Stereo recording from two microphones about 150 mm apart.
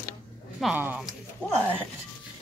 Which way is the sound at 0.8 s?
15° right (ahead or behind).